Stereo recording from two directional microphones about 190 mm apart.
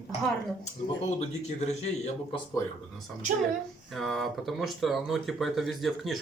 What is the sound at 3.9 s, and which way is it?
Speech, centre (ahead or behind).